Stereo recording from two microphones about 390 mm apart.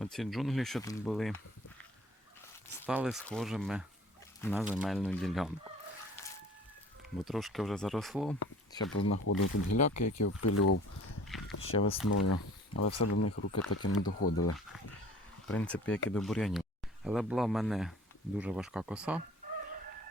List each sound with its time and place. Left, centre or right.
0.0 s speech: centre
2.8 s speech: centre
7.3 s speech: centre
9.0 s speech: left
11.3 s a sound: centre
11.6 s speech: centre
12.0 s speech: left
15.4 s speech: centre